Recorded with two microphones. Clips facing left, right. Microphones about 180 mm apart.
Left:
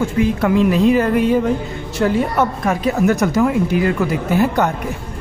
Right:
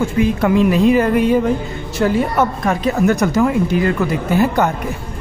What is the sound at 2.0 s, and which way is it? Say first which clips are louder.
Speech: right 1 dB; 5° right (ahead or behind).